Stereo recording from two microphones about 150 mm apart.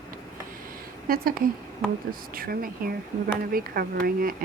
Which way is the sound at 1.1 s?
75° right (ahead or behind).